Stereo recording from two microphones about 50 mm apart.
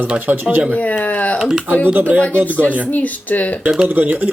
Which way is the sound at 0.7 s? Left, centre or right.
Left.